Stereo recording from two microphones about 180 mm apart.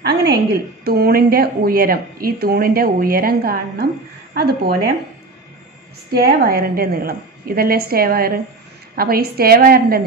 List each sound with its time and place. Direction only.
0.0 s a sound: 65° right (ahead or behind)
0.8 s speech: 60° right (ahead or behind)
6.2 s speech: 60° right (ahead or behind)